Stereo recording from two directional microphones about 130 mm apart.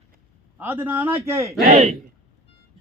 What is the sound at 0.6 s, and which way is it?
Speech, 15° right (ahead or behind).